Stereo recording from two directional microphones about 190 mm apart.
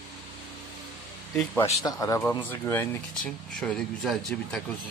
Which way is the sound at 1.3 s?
10° left (ahead or behind).